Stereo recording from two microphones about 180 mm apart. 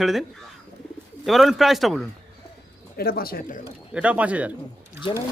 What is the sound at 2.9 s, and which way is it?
Speech, 55° left (ahead or behind).